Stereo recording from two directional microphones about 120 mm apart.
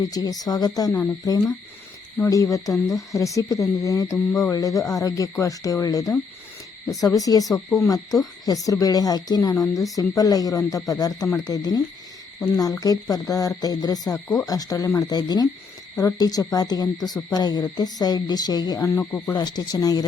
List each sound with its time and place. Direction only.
0.0 s a woman's voice: 30° left (ahead or behind)
7.2 s a woman's voice: 30° left (ahead or behind)
19.3 s a woman's voice: 35° left (ahead or behind)